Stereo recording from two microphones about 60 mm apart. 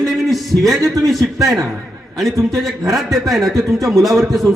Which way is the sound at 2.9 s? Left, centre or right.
Centre.